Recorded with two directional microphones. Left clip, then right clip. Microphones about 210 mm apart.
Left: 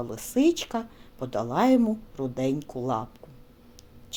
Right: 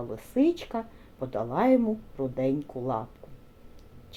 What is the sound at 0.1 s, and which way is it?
Speech, 40° left (ahead or behind).